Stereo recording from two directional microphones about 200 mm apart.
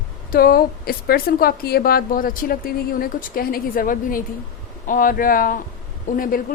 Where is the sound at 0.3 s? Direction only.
50° left (ahead or behind).